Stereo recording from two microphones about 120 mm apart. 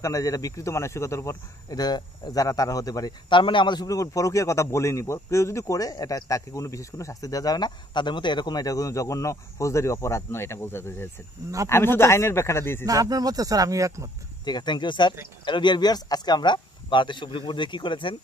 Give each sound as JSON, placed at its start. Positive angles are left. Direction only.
{"t": 0.0, "sound": "a man's voice", "side_deg": 30}
{"t": 3.3, "sound": "a man's voice", "side_deg": 45}
{"t": 12.8, "sound": "speech", "side_deg": -30}
{"t": 14.4, "sound": "speech", "side_deg": 35}